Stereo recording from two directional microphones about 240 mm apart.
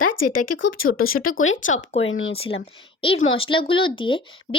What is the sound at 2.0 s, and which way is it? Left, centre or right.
Speech, left.